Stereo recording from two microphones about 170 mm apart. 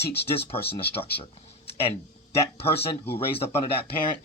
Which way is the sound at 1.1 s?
35° left (ahead or behind).